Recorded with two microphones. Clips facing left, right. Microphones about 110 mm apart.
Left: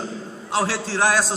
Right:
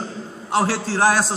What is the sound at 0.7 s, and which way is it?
Speech, 40° right (ahead or behind).